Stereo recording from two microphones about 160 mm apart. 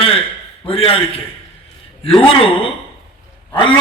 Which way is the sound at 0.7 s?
35° left (ahead or behind).